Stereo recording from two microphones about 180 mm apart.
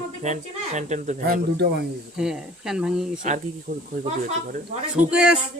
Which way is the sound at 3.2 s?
45° right (ahead or behind).